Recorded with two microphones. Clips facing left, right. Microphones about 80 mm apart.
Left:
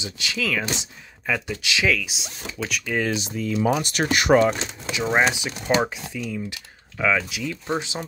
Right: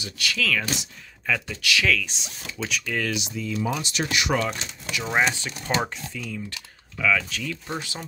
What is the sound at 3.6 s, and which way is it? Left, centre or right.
Speech, left.